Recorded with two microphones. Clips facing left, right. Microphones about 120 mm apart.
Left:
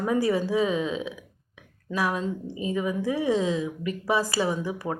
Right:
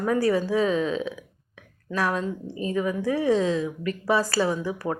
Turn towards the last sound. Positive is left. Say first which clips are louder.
# right 2 dB
turn(degrees=15)  # may be behind; listen again after turning